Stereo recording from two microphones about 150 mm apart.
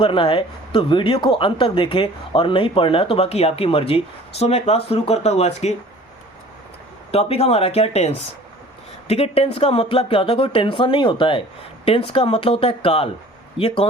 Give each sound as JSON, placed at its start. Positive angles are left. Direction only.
{"t": 0.0, "sound": "speech", "side_deg": 35}
{"t": 7.1, "sound": "speech", "side_deg": 45}